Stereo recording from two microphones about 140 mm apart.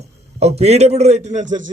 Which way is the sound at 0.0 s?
50° right (ahead or behind).